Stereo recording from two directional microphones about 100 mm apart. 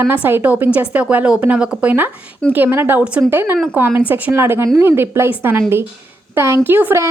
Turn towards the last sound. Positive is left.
turn(degrees=-20)  # may be behind; listen again after turning